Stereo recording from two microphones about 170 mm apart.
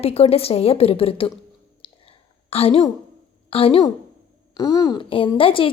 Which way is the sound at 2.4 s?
35° left (ahead or behind).